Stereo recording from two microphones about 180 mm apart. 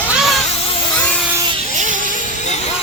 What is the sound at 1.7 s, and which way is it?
Music, 45° right (ahead or behind).